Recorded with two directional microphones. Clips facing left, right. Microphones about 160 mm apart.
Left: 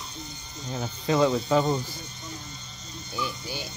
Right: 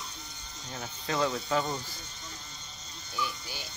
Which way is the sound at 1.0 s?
20° left (ahead or behind).